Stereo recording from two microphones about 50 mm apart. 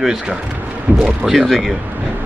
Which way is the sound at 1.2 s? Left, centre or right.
Centre.